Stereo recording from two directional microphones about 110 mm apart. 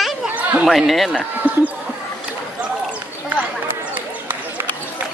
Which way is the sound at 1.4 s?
15° right (ahead or behind).